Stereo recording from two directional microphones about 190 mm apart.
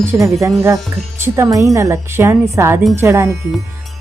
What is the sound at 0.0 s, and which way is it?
A woman's voice, 15° right (ahead or behind).